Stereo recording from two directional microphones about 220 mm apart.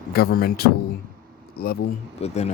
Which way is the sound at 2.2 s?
30° left (ahead or behind).